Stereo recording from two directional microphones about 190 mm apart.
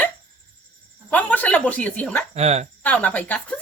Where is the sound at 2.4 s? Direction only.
35° right (ahead or behind).